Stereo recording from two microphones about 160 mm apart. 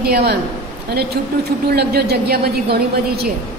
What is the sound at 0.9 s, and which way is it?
A woman's voice, 85° right.